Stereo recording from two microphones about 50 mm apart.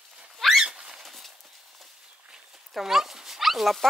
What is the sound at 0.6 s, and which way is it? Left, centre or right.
Rodents, centre.